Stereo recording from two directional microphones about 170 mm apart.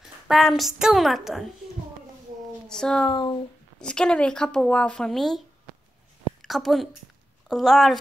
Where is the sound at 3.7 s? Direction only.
5° left (ahead or behind).